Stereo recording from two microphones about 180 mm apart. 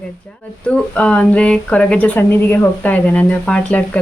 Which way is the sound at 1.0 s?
5° left (ahead or behind).